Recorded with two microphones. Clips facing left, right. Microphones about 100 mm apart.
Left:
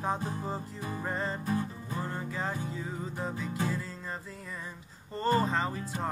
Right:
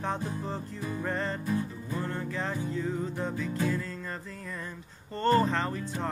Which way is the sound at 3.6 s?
25° left (ahead or behind).